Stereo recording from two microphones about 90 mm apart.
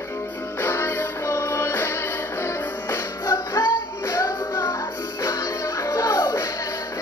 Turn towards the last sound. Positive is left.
turn(degrees=40)  # may be behind; listen again after turning